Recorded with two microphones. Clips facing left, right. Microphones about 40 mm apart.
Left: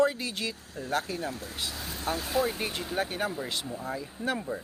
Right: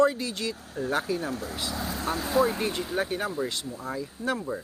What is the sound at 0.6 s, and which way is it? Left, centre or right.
Speech, right.